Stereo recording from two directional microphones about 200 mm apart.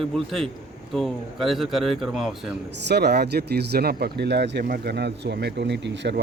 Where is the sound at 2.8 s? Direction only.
55° right (ahead or behind).